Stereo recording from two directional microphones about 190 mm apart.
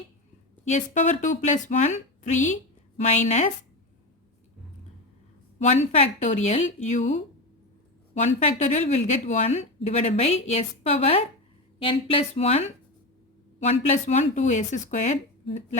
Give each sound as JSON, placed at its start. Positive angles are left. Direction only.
{"t": 0.6, "sound": "a woman's voice", "side_deg": 40}
{"t": 5.5, "sound": "a woman's voice", "side_deg": 35}
{"t": 8.7, "sound": "a woman's voice", "side_deg": 35}